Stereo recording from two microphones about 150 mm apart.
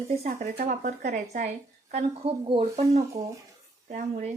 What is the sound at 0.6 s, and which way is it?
A woman's voice, 55° right (ahead or behind).